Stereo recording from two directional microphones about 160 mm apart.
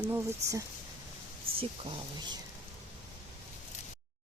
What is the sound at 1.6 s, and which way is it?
Speech, 30° right (ahead or behind).